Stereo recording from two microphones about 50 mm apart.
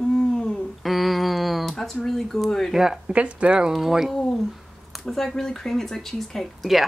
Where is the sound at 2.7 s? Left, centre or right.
Centre.